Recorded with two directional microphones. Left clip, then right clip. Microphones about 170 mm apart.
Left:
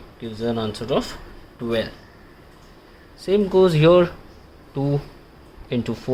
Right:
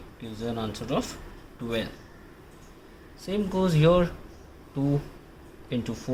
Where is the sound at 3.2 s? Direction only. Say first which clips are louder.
Left 11 dB; 60° left (ahead or behind).